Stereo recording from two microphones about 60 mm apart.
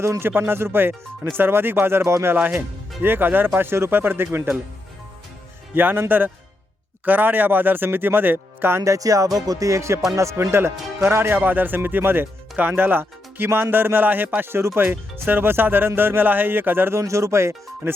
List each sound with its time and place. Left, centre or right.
0.0 s speech: right
2.2 s speech: right
5.7 s speech: right
8.8 s speech: right
11.1 s speech: right
17.0 s speech: right